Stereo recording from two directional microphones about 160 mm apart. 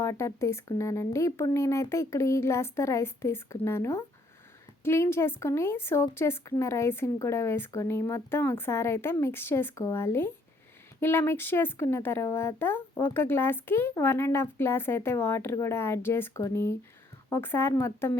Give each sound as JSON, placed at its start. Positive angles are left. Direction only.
{"t": 0.0, "sound": "a woman's voice", "side_deg": 20}